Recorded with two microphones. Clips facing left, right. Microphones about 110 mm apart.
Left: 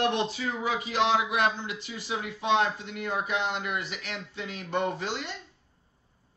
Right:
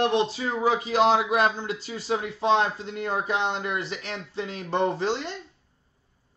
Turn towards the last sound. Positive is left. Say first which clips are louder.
# right 6 dB
turn(degrees=-35)  # may be behind; listen again after turning